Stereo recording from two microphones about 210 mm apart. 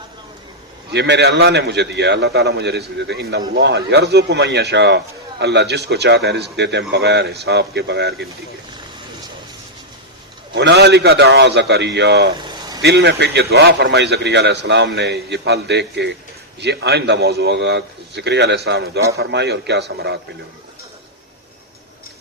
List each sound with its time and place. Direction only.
0.9 s a man's voice: 55° right (ahead or behind)
10.5 s a man's voice: 55° right (ahead or behind)